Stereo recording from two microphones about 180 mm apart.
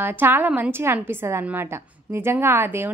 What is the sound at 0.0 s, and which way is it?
A woman's voice, 10° right (ahead or behind).